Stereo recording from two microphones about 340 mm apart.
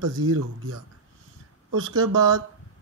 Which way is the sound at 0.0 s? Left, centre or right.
Right.